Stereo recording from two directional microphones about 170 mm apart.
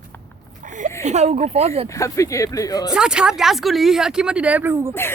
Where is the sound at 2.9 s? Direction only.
5° right (ahead or behind).